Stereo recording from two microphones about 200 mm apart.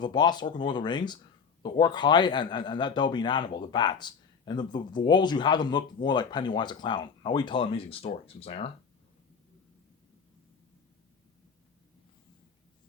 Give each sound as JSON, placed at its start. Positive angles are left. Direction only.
{"t": 0.0, "sound": "a man's voice", "side_deg": 20}